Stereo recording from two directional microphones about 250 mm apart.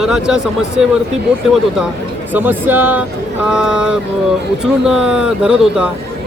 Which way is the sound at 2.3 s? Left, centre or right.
Centre.